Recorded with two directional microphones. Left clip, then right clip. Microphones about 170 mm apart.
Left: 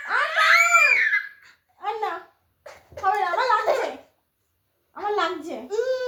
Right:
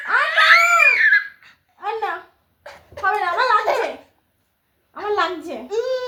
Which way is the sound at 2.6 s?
5° right (ahead or behind).